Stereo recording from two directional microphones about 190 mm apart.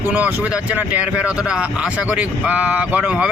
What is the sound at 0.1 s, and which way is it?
Speech, 5° right (ahead or behind).